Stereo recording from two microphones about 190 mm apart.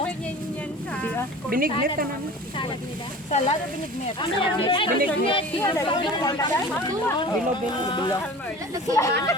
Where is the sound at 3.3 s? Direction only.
35° left (ahead or behind).